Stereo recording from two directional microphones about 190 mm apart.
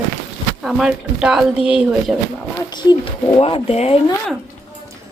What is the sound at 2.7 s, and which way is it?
Speech, 20° left (ahead or behind).